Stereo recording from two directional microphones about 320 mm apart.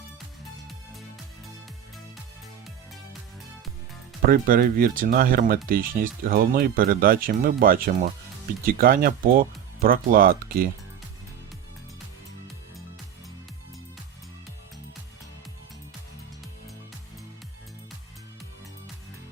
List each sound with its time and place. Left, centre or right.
4.3 s speech: right